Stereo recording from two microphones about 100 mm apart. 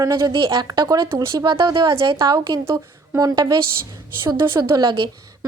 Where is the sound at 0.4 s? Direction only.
45° right (ahead or behind).